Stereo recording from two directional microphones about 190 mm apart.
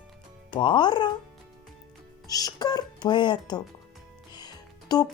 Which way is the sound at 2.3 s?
20° left (ahead or behind).